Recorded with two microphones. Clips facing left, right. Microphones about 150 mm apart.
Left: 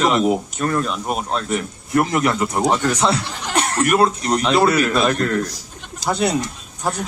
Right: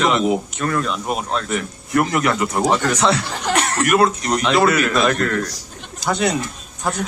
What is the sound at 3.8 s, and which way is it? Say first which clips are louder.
A man's voice: right 1 dB; 25° left (ahead or behind).